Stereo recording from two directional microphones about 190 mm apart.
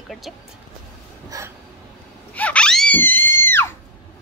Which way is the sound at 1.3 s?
20° right (ahead or behind).